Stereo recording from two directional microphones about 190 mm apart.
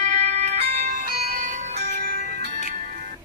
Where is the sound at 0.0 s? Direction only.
40° right (ahead or behind).